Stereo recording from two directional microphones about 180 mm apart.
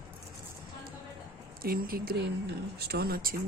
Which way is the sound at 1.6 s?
55° right (ahead or behind).